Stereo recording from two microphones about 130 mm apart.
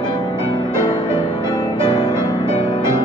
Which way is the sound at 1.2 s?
30° left (ahead or behind).